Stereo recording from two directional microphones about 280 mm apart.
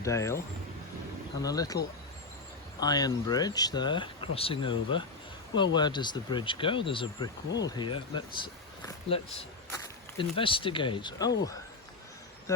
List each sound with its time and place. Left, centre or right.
0.0 s speech: centre
2.8 s speech: centre